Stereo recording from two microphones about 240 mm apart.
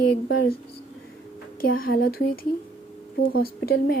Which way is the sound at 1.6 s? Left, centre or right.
Left.